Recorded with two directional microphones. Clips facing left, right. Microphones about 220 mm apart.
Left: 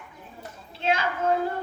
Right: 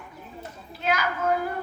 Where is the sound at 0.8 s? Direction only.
25° left (ahead or behind).